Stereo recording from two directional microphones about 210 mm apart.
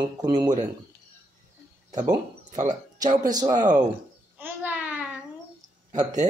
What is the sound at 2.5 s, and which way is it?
Speech, 35° right (ahead or behind).